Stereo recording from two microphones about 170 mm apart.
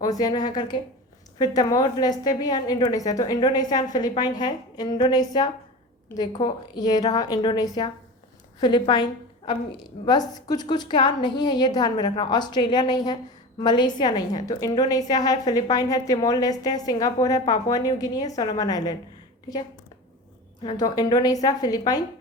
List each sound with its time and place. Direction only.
0.0 s a woman's voice: 20° left (ahead or behind)